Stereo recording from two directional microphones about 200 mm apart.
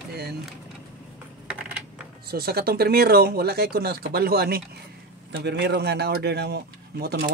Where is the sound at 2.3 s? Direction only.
50° right (ahead or behind).